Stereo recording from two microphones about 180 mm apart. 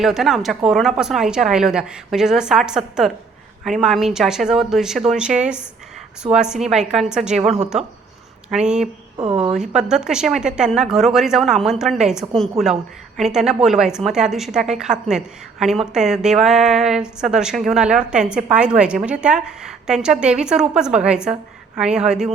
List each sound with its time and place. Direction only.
0.0 s a woman's voice: centre (ahead or behind)
9.1 s speech: 30° right (ahead or behind)
9.5 s a woman's voice: 5° right (ahead or behind)